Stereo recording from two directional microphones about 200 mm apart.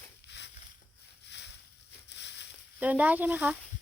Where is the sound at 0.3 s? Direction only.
60° left (ahead or behind).